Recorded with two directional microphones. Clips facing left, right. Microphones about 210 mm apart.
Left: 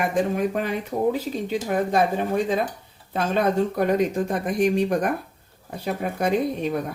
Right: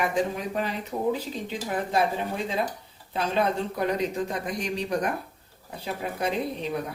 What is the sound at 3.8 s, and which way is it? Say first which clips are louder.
A woman's voice: left 5 dB; 50° left (ahead or behind).